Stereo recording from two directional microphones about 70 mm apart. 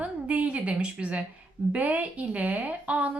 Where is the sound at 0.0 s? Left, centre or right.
Centre.